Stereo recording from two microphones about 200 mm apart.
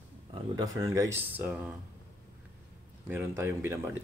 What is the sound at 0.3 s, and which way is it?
Speech, 20° right (ahead or behind).